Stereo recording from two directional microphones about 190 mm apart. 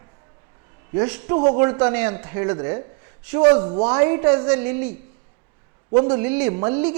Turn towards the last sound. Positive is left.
turn(degrees=-10)  # may be behind; listen again after turning